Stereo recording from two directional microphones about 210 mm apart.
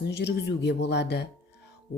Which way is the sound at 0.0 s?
50° left (ahead or behind).